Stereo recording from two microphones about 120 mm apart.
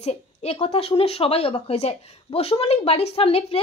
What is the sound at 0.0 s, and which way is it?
Speech, 65° left (ahead or behind).